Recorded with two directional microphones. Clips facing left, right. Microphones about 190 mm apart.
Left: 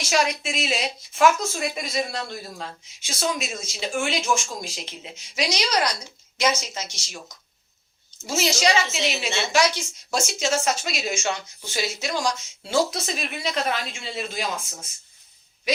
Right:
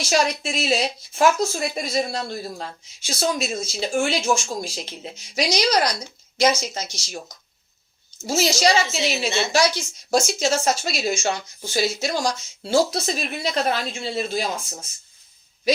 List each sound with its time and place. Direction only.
0.1 s a woman's voice: 35° right (ahead or behind)
8.2 s a woman's voice: 35° right (ahead or behind)